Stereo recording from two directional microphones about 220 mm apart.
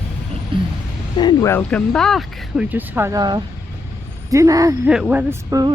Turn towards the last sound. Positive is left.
turn(degrees=-15)  # may be behind; listen again after turning